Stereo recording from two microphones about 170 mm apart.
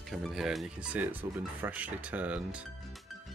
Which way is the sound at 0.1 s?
Centre (ahead or behind).